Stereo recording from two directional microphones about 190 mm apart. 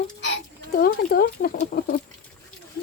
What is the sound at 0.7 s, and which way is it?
Speech, 50° left (ahead or behind).